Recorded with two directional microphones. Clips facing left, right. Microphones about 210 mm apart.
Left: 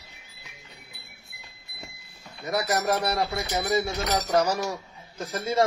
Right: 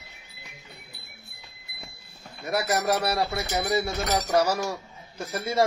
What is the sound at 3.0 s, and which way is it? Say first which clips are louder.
Speech: even; 15° left (ahead or behind).